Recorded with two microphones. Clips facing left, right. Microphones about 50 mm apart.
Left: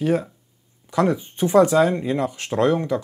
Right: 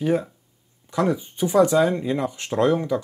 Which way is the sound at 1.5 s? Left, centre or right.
Left.